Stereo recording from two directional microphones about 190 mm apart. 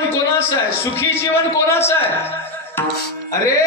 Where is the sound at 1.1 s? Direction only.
10° left (ahead or behind).